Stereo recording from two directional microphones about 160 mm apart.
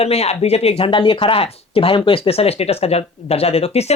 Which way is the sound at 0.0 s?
40° left (ahead or behind).